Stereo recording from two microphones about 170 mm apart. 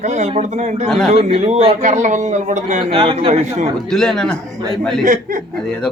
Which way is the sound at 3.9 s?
5° left (ahead or behind).